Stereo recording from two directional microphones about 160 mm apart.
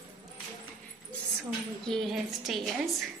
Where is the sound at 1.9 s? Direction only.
Centre (ahead or behind).